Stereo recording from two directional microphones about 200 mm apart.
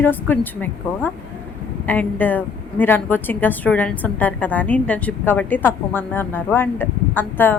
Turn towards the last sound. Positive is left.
turn(degrees=10)  # may be behind; listen again after turning